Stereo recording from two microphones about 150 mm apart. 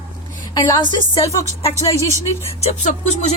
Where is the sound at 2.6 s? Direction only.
50° left (ahead or behind).